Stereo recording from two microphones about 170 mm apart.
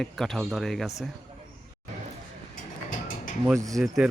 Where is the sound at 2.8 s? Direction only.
50° left (ahead or behind).